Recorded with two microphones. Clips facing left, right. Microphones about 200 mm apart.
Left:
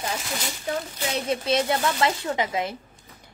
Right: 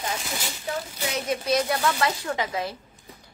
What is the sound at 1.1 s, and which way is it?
A woman's voice, 25° left (ahead or behind).